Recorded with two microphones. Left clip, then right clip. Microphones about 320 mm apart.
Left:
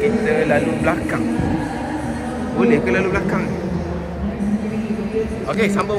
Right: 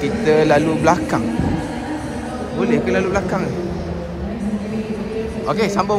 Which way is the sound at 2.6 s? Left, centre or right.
Centre.